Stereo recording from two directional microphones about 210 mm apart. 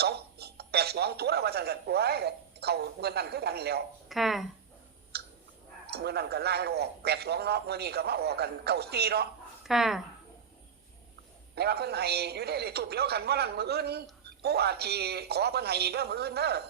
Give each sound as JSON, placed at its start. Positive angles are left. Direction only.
{"t": 0.0, "sound": "speech", "side_deg": -50}
{"t": 4.1, "sound": "speech", "side_deg": 0}
{"t": 5.1, "sound": "clicking", "side_deg": -50}
{"t": 5.9, "sound": "a man's voice", "side_deg": -50}
{"t": 9.6, "sound": "speech", "side_deg": 0}
{"t": 11.5, "sound": "a man's voice", "side_deg": -50}